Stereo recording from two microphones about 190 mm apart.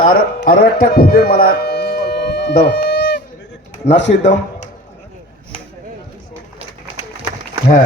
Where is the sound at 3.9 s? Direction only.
70° left (ahead or behind).